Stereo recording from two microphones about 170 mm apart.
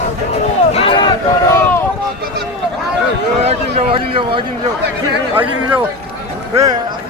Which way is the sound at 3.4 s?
40° right (ahead or behind).